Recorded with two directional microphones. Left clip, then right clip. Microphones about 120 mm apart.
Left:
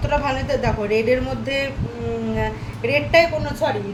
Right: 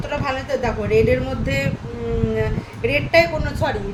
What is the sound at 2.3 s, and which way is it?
A woman's voice, 5° left (ahead or behind).